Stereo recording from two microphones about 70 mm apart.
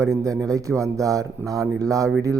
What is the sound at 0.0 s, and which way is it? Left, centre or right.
Speech, right.